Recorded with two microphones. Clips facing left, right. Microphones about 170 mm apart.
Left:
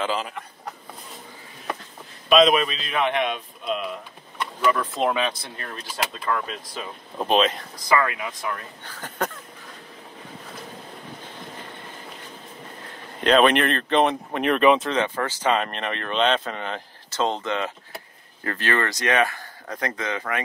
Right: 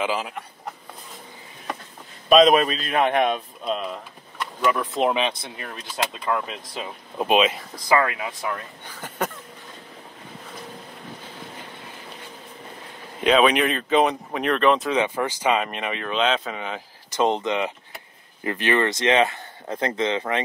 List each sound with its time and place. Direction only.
0.0 s speech: 10° right (ahead or behind)
2.2 s a man's voice: 40° right (ahead or behind)
4.6 s speech: 15° right (ahead or behind)
7.2 s speech: 10° right (ahead or behind)
7.9 s speech: 25° right (ahead or behind)
8.8 s speech: 10° right (ahead or behind)
13.2 s speech: 5° right (ahead or behind)
14.9 s speech: 10° right (ahead or behind)
17.2 s speech: 15° right (ahead or behind)